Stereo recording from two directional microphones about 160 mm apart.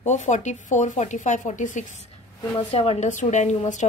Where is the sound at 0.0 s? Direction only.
45° left (ahead or behind).